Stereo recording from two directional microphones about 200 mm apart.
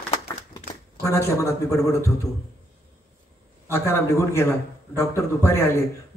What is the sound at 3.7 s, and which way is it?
Speech, 10° left (ahead or behind).